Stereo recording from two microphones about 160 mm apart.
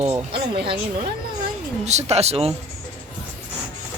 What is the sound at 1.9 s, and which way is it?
Speech, 45° right (ahead or behind).